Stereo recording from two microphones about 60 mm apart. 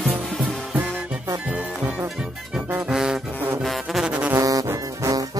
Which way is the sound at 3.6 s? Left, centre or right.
Centre.